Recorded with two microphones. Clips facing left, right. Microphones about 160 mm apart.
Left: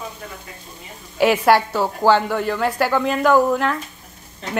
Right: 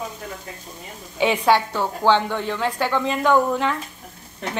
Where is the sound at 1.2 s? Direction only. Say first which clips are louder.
Left 3 dB; 5° left (ahead or behind).